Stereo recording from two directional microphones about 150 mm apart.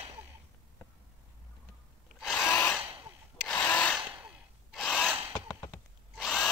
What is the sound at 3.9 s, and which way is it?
Gasp, 5° right (ahead or behind).